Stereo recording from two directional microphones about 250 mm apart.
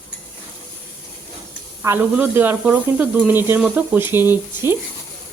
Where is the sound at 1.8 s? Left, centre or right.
Centre.